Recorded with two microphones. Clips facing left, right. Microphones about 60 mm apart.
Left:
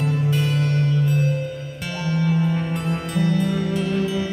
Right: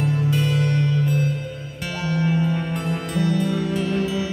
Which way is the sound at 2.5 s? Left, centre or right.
Centre.